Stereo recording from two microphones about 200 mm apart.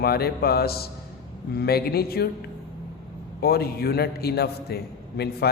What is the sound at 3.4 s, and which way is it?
A man's voice, 50° left (ahead or behind).